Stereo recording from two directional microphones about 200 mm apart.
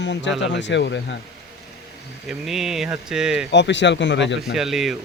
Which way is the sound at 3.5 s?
60° left (ahead or behind).